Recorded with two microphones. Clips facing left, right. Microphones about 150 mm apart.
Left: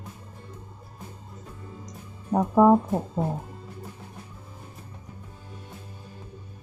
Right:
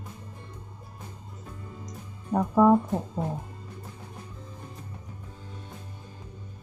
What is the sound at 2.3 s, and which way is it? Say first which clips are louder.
Speech: left 2 dB; 15° left (ahead or behind).